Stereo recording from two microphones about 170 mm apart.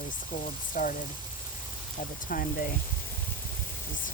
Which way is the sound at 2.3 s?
55° left (ahead or behind).